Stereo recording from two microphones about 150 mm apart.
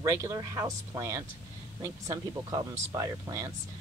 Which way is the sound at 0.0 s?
20° right (ahead or behind).